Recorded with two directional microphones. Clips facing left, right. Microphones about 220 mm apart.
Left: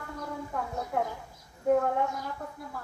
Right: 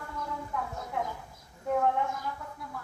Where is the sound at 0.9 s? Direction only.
45° left (ahead or behind).